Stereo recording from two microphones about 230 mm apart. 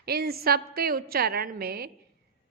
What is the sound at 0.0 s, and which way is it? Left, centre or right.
A woman's voice, right.